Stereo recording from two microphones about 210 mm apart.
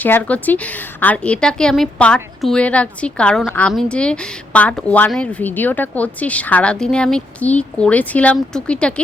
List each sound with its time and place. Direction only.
0.0 s a woman's voice: 5° left (ahead or behind)